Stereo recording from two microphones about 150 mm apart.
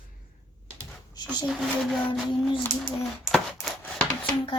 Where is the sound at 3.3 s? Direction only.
5° left (ahead or behind).